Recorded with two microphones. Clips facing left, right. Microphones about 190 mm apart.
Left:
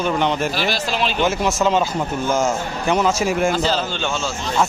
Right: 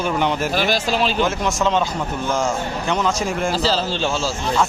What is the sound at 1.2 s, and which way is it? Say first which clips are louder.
Speech: left 1 dB; 5° left (ahead or behind).